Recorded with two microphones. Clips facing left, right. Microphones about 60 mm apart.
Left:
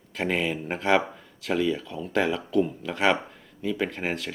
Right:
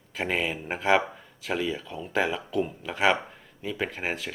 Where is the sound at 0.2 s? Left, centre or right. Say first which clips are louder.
Left 2 dB; centre.